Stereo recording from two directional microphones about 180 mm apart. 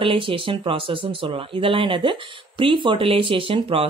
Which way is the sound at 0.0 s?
30° right (ahead or behind).